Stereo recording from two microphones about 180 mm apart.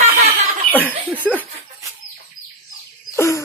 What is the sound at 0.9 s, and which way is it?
Speech, 10° left (ahead or behind).